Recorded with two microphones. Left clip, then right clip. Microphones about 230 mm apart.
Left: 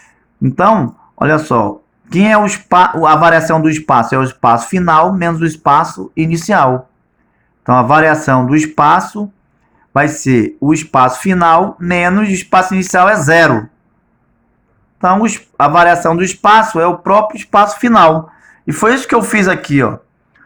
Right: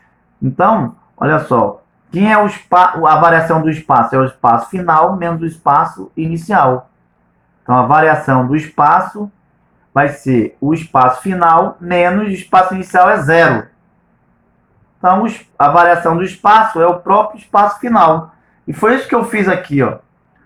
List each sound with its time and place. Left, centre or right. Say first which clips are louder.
1.2 s speech: even; left
15.0 s speech: even; left